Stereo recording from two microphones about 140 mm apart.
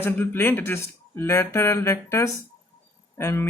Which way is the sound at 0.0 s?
15° left (ahead or behind).